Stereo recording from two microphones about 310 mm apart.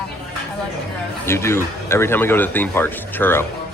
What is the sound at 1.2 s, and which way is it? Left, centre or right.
Speech, centre.